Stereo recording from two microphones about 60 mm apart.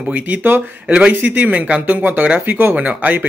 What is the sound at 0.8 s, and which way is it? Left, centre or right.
Speech, centre.